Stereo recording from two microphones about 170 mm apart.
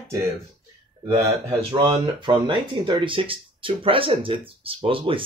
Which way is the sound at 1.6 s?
30° right (ahead or behind).